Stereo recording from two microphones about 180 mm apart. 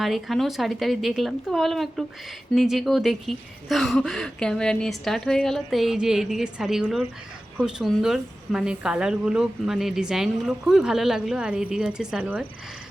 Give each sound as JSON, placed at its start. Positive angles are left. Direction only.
{"t": 0.0, "sound": "a woman's voice", "side_deg": 0}